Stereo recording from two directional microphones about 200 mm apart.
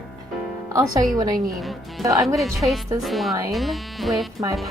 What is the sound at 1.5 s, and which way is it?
Speech, centre (ahead or behind).